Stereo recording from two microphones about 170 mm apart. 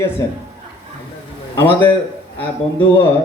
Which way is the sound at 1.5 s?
10° left (ahead or behind).